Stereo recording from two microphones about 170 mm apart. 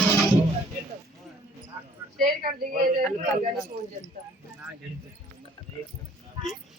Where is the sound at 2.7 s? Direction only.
50° right (ahead or behind).